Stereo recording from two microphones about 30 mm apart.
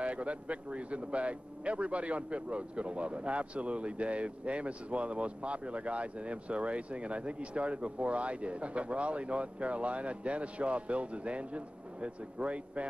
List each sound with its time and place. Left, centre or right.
0.0 s speech: right